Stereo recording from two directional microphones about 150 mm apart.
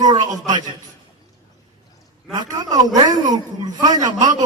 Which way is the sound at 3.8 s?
25° right (ahead or behind).